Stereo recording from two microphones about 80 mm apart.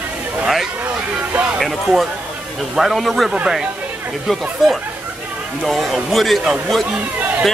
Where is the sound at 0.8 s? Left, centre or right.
Right.